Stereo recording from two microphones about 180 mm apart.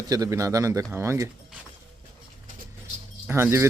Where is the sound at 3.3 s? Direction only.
15° right (ahead or behind).